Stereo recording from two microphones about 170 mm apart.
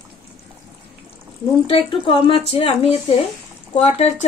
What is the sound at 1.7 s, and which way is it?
Speech, 30° left (ahead or behind).